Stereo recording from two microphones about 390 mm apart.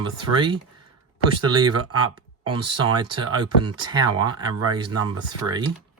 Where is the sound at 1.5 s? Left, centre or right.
Right.